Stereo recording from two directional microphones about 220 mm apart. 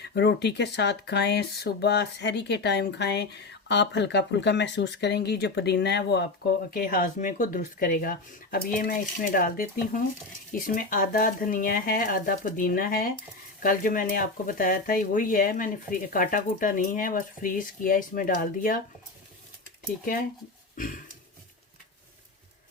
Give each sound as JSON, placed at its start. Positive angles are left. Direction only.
{"t": 0.0, "sound": "speech", "side_deg": 50}
{"t": 6.7, "sound": "speech", "side_deg": 40}
{"t": 20.7, "sound": "a sound", "side_deg": 40}